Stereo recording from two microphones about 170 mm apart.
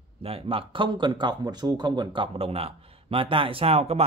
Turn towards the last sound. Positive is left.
turn(degrees=-35)  # may be behind; listen again after turning